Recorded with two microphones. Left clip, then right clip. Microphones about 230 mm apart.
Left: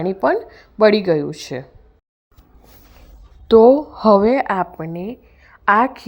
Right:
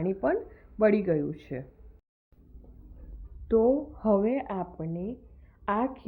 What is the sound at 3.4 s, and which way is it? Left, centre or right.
A woman's voice, left.